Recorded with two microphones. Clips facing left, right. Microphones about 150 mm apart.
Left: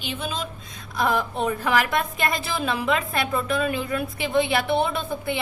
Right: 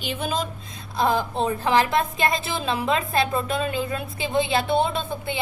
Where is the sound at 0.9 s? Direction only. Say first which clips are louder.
Right 1 dB; 25° right (ahead or behind).